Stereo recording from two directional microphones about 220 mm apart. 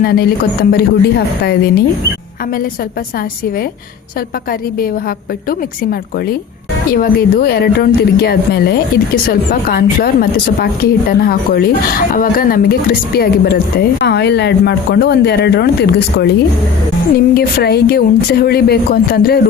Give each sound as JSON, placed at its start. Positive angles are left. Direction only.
{"t": 0.0, "sound": "speech", "side_deg": 45}
{"t": 4.8, "sound": "speech", "side_deg": 45}